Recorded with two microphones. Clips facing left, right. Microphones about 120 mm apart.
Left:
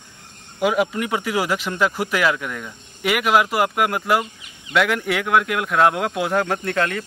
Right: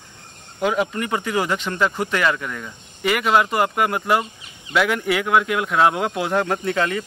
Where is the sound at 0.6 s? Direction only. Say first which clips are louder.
Left 1 dB; 5° left (ahead or behind).